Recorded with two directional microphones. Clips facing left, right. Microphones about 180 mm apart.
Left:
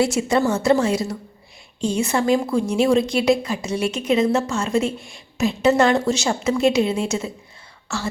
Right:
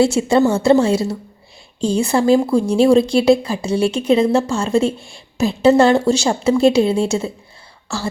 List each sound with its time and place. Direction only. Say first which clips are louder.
0.0 s a woman's voice: right 5 dB; 30° right (ahead or behind)